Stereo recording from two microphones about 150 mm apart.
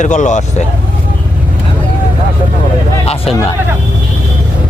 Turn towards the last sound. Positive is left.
turn(degrees=40)  # may be behind; listen again after turning